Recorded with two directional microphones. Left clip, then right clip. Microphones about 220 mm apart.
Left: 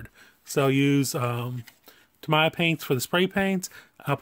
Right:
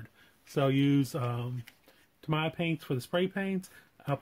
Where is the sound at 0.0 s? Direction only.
35° left (ahead or behind).